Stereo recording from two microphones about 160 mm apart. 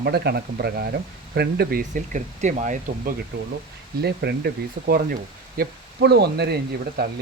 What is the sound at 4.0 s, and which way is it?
Speech, 90° right.